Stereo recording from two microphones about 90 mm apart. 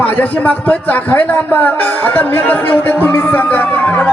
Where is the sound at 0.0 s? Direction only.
20° left (ahead or behind).